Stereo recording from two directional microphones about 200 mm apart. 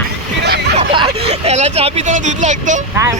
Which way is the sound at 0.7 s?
30° right (ahead or behind).